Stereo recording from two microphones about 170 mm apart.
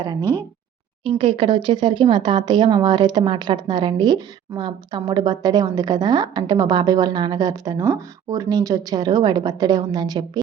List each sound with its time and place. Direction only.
0.0 s speech: 25° right (ahead or behind)